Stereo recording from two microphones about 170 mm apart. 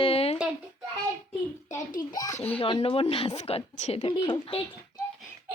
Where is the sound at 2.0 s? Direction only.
25° left (ahead or behind).